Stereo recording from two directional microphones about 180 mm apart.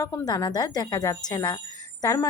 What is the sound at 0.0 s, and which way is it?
A woman's voice, 20° left (ahead or behind).